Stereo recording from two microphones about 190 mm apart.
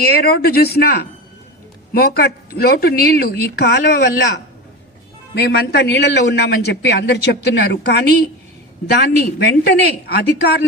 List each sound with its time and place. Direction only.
0.0 s a man's voice: 55° left (ahead or behind)
5.3 s a man's voice: 60° left (ahead or behind)